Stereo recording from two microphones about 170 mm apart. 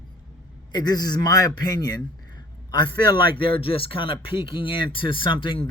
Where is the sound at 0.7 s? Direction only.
20° left (ahead or behind).